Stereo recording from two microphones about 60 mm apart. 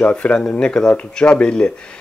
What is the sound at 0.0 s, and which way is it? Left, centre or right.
Speech, centre.